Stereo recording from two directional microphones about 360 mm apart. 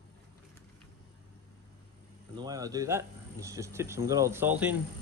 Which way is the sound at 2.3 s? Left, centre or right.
Centre.